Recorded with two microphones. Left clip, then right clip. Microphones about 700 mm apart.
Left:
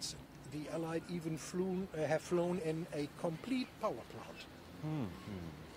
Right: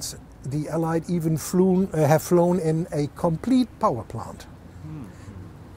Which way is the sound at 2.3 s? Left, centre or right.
Right.